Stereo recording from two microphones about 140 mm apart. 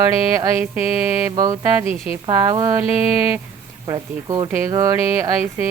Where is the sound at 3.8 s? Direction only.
30° right (ahead or behind).